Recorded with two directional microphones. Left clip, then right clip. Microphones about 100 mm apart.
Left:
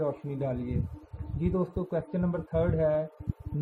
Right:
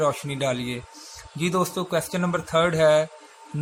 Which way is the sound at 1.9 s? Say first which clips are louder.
Right 7 dB; 35° right (ahead or behind).